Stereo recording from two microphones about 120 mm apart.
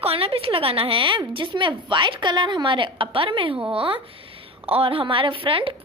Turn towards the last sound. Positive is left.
turn(degrees=-50)  # may be behind; listen again after turning